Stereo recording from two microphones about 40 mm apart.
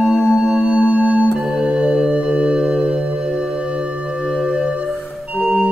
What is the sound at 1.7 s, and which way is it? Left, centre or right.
Music, centre.